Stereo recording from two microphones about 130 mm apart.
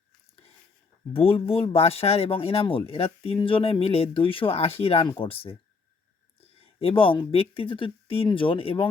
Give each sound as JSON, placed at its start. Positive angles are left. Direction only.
{"t": 1.1, "sound": "speech", "side_deg": 45}
{"t": 6.6, "sound": "speech", "side_deg": 45}